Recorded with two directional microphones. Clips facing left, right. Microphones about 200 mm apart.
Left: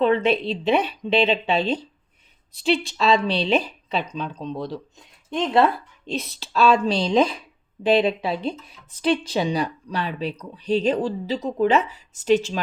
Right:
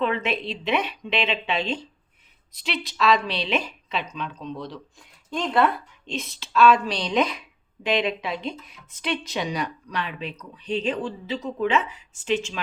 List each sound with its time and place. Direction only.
0.0 s speech: 35° left (ahead or behind)
4.9 s speech: 20° left (ahead or behind)
6.1 s speech: 40° left (ahead or behind)